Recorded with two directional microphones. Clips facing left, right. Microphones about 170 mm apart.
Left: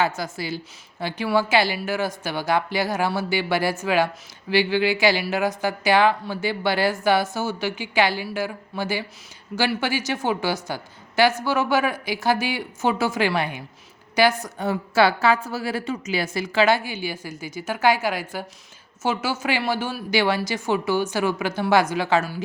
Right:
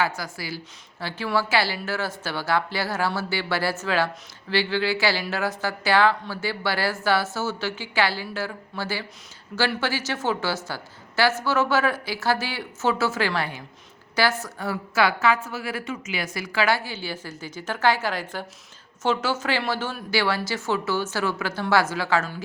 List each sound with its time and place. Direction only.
0.0 s a woman's voice: 25° left (ahead or behind)